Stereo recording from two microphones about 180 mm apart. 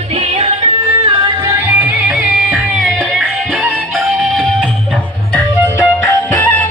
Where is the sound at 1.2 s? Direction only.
20° right (ahead or behind).